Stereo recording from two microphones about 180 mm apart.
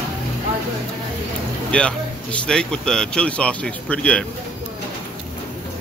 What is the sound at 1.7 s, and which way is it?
Speech, 5° left (ahead or behind).